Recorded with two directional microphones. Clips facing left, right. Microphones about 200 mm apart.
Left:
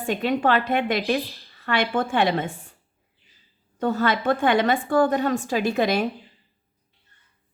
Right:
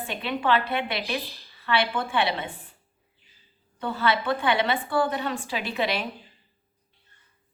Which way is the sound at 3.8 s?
45° left (ahead or behind).